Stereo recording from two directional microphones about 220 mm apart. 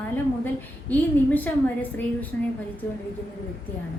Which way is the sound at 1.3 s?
10° left (ahead or behind).